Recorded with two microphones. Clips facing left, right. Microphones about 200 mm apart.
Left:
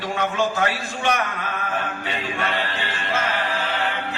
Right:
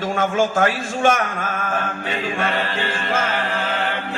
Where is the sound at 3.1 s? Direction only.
45° right (ahead or behind).